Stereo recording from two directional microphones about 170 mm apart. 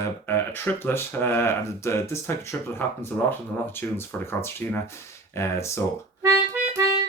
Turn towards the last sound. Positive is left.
turn(degrees=-15)  # may be behind; listen again after turning